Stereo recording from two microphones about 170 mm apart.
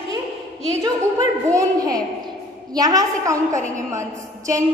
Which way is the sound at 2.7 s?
20° right (ahead or behind).